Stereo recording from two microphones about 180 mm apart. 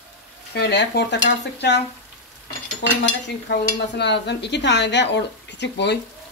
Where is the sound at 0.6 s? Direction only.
70° left (ahead or behind).